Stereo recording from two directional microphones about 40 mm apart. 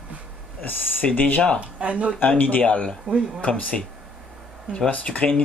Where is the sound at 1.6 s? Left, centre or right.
Right.